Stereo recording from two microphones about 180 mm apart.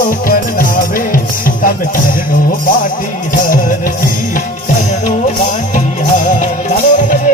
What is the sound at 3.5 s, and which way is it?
Music, 50° left (ahead or behind).